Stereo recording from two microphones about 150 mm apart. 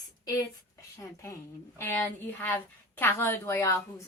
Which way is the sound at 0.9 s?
20° left (ahead or behind).